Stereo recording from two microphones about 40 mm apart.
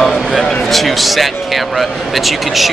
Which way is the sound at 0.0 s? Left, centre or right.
Centre.